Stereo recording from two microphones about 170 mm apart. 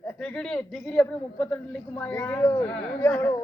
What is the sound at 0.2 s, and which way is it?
A man's voice, 5° left (ahead or behind).